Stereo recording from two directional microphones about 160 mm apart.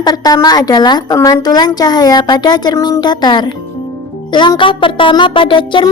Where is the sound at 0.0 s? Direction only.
25° left (ahead or behind).